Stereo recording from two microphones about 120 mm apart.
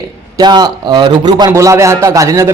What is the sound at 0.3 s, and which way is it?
A man's voice, 35° right (ahead or behind).